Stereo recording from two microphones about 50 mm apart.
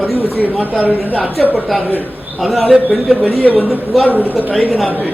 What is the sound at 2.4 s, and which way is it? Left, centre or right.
A man's voice, centre.